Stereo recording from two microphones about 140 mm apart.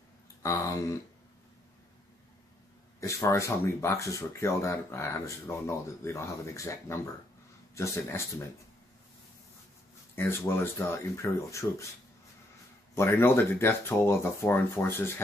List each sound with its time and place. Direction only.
0.4 s speech: 20° left (ahead or behind)
3.0 s speech: 20° left (ahead or behind)
10.1 s speech: 15° left (ahead or behind)
12.9 s speech: 20° left (ahead or behind)